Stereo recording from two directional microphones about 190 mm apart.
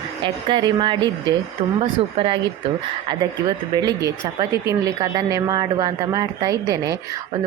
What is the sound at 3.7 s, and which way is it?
Speech, 20° right (ahead or behind).